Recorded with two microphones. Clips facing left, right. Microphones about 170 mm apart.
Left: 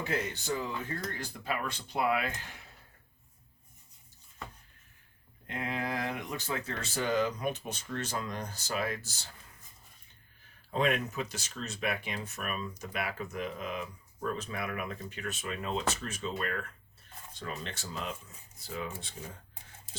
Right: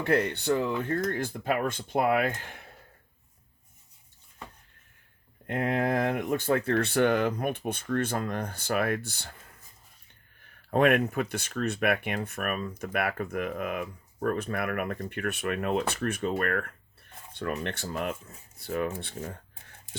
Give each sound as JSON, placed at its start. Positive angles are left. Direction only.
{"t": 0.0, "sound": "speech", "side_deg": -60}
{"t": 5.5, "sound": "speech", "side_deg": -55}
{"t": 10.7, "sound": "speech", "side_deg": -60}